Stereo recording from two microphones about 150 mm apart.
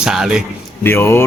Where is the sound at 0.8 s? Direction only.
15° left (ahead or behind).